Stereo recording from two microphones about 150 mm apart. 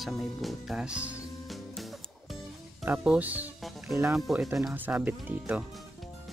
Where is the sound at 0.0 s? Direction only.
Centre (ahead or behind).